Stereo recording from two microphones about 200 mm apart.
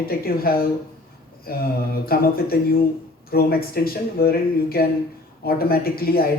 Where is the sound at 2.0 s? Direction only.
50° left (ahead or behind).